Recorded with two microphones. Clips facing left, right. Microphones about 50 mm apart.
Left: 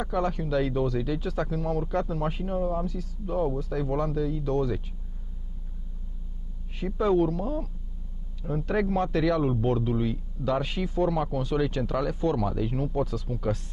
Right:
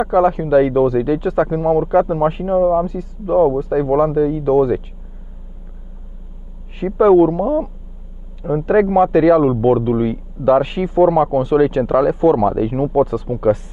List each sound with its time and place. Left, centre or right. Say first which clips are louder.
0.0 s a man's voice: right 14 dB; right
6.8 s a man's voice: right 13 dB; right